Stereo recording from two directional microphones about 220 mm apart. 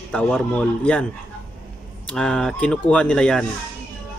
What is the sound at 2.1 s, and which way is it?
Speech, 5° left (ahead or behind).